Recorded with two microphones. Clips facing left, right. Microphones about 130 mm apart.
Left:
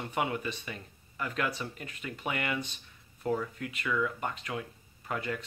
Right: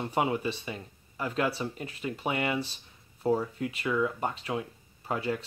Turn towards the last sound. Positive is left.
turn(degrees=-30)  # may be behind; listen again after turning